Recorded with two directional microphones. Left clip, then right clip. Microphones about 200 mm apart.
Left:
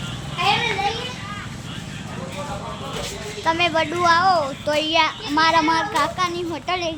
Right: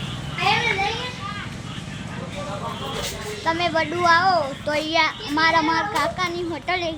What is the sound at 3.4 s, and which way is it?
A child's voice, 20° left (ahead or behind).